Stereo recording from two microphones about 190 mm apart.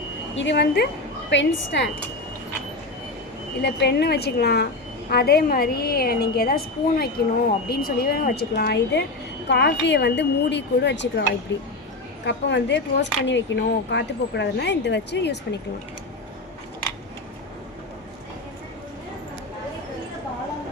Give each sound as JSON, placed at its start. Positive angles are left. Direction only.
{"t": 0.3, "sound": "speech", "side_deg": 65}
{"t": 3.6, "sound": "a woman's voice", "side_deg": 60}